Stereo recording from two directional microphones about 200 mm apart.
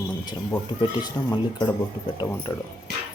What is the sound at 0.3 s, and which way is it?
Speech, 20° left (ahead or behind).